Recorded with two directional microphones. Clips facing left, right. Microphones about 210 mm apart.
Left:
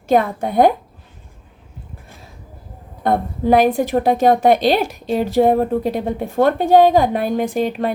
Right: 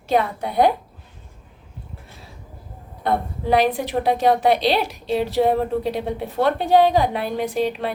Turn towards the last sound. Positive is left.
turn(degrees=50)  # may be behind; listen again after turning